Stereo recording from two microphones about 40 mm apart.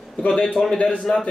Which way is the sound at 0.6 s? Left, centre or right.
Left.